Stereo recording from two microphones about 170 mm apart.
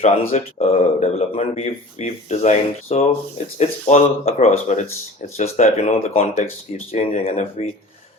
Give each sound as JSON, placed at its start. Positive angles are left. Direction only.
{"t": 0.0, "sound": "speech", "side_deg": 40}